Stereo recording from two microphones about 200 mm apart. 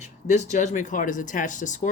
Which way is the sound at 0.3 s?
35° left (ahead or behind).